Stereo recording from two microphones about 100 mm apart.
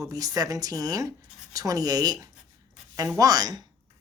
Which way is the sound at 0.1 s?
40° right (ahead or behind).